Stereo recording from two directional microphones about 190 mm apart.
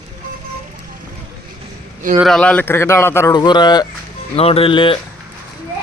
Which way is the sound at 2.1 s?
Centre (ahead or behind).